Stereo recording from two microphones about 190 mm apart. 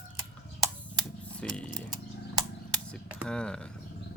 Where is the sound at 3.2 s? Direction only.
5° left (ahead or behind).